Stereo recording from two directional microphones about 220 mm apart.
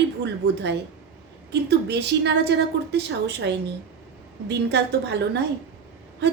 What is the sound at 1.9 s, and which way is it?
A woman's voice, 50° right (ahead or behind).